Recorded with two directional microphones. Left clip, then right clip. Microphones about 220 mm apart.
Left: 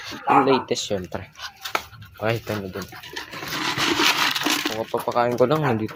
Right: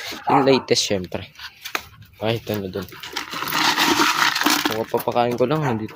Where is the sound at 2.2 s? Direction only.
30° right (ahead or behind).